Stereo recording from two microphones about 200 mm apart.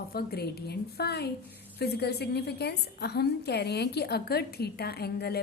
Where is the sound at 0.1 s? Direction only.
50° left (ahead or behind).